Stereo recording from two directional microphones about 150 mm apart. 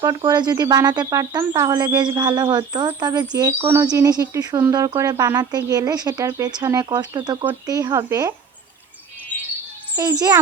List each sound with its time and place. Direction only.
0.0 s speech: 25° right (ahead or behind)
9.9 s speech: 20° right (ahead or behind)